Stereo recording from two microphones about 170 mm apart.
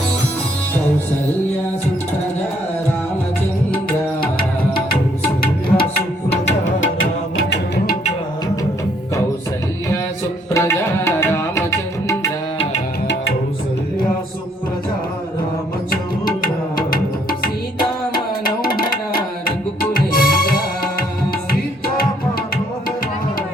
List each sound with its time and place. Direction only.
5.4 s music: 60° left (ahead or behind); by 6.7 s 85° left
10.5 s tabla: 15° left (ahead or behind)
16.4 s music: 55° left (ahead or behind)
19.5 s music: 55° left (ahead or behind)